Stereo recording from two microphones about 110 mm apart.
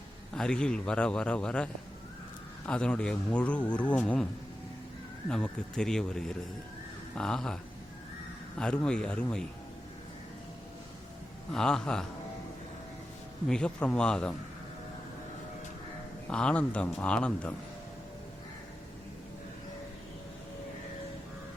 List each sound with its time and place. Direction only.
0.3 s speech: 5° left (ahead or behind)
5.3 s speech: 5° left (ahead or behind)
11.5 s speech: 5° left (ahead or behind)
13.5 s speech: 10° left (ahead or behind)
16.3 s speech: 10° left (ahead or behind)